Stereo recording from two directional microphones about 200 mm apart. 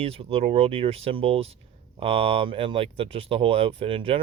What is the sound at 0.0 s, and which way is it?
Speech, 30° right (ahead or behind).